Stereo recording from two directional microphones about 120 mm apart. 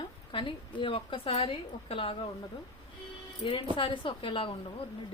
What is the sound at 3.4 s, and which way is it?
A woman's voice, 45° left (ahead or behind).